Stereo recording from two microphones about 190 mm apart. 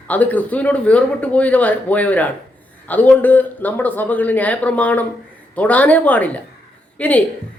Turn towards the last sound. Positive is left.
turn(degrees=5)  # may be behind; listen again after turning